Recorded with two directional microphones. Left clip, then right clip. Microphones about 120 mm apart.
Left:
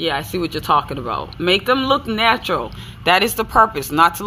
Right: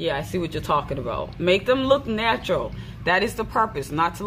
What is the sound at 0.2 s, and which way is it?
Speech, 15° left (ahead or behind).